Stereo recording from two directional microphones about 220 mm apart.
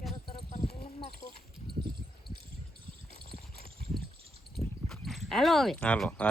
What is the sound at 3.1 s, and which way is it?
Clip-clop, 45° left (ahead or behind).